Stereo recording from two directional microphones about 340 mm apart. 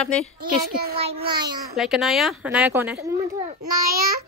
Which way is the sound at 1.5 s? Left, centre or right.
Centre.